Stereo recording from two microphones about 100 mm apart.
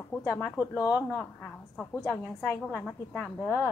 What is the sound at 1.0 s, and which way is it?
A woman's voice, 20° left (ahead or behind).